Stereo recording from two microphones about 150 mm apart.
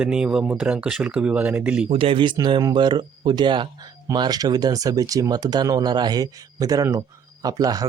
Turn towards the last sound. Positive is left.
turn(degrees=-25)  # may be behind; listen again after turning